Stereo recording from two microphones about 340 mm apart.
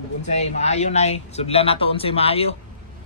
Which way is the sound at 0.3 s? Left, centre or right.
Centre.